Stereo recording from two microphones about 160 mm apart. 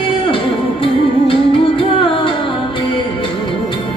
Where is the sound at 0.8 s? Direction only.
35° left (ahead or behind).